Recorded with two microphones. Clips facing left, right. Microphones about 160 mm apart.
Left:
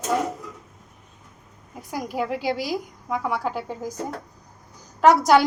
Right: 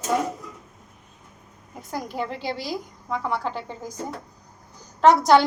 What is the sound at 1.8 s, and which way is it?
A woman's voice, 10° left (ahead or behind).